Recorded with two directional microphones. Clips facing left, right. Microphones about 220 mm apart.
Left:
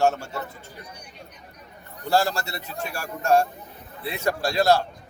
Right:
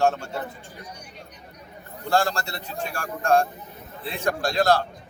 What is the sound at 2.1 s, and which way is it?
A man's voice, 5° left (ahead or behind).